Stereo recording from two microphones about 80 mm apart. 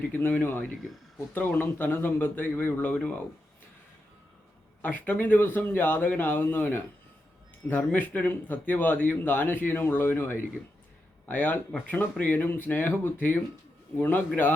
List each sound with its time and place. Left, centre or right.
0.1 s speech: left
4.8 s speech: left